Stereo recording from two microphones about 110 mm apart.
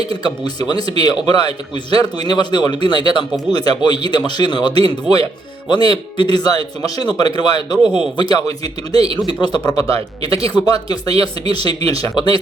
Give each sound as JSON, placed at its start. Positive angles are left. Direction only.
{"t": 0.2, "sound": "speech", "side_deg": 40}